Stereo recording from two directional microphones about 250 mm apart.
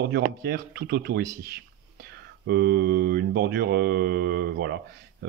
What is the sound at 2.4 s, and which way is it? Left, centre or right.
Mantra, right.